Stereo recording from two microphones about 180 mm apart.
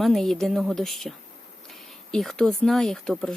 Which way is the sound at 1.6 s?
Centre (ahead or behind).